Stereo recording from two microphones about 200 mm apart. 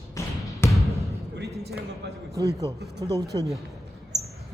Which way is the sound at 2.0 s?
60° right (ahead or behind).